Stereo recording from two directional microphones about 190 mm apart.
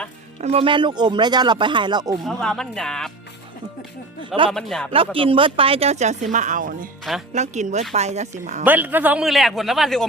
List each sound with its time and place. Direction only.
0.4 s speech: 30° right (ahead or behind)
2.2 s a man's voice: centre (ahead or behind)
4.5 s a man's voice: 5° left (ahead or behind)
4.9 s speech: 30° right (ahead or behind)
8.6 s a man's voice: 10° right (ahead or behind)